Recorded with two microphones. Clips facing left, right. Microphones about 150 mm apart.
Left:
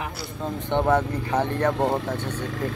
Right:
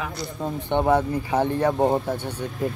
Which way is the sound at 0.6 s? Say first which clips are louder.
Right 1 dB; 15° right (ahead or behind).